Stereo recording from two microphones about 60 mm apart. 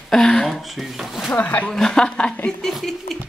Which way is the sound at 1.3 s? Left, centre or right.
Left.